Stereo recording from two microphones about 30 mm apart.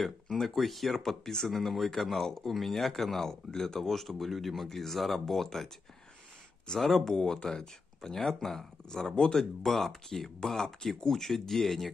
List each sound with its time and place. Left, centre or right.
0.0 s speech: centre
1.5 s speech: centre
6.7 s speech: left
7.1 s speech: centre
9.1 s speech: left
9.4 s speech: centre